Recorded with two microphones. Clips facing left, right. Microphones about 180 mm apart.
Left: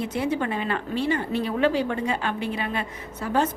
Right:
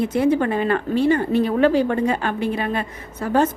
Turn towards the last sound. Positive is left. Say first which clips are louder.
# right 5 dB
turn(degrees=-45)  # may be behind; listen again after turning